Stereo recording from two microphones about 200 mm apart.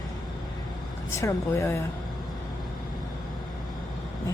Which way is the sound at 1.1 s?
15° left (ahead or behind).